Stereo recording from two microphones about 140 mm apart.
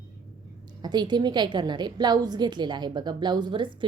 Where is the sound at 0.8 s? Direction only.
30° right (ahead or behind).